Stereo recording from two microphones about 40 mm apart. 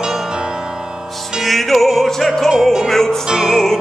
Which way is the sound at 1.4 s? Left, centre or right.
Centre.